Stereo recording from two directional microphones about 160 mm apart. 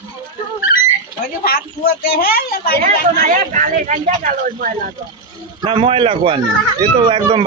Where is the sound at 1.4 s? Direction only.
70° left (ahead or behind).